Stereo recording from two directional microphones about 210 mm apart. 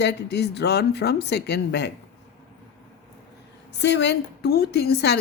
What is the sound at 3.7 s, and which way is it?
Speech, 55° left (ahead or behind).